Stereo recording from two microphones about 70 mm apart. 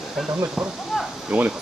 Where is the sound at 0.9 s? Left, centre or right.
Centre.